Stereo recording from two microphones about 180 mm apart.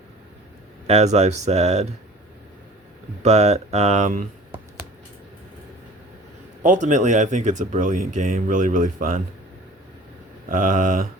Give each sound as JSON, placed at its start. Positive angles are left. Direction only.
{"t": 0.9, "sound": "speech", "side_deg": -35}
{"t": 3.2, "sound": "speech", "side_deg": -35}
{"t": 6.6, "sound": "speech", "side_deg": -45}
{"t": 10.5, "sound": "speech", "side_deg": -45}